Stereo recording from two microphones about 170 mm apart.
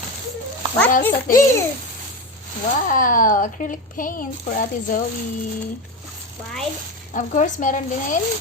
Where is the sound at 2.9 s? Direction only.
50° left (ahead or behind).